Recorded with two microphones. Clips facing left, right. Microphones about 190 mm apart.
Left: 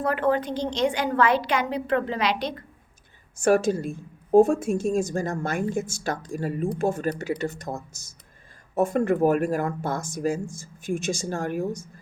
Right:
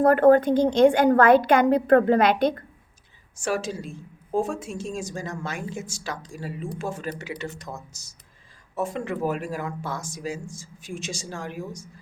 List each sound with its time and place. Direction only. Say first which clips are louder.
0.0 s a woman's voice: right 8 dB; 50° right (ahead or behind)
3.4 s a woman's voice: left 7 dB; 55° left (ahead or behind)